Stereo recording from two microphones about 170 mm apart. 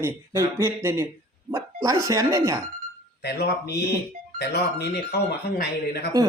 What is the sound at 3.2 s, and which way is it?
Speech, 75° left (ahead or behind).